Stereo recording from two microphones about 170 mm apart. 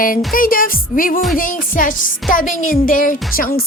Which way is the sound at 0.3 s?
55° left (ahead or behind).